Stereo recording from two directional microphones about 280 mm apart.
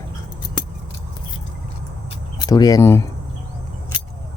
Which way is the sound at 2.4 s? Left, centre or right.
Centre.